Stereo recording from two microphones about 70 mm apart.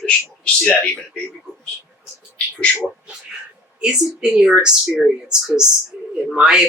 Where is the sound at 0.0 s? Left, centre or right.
Centre.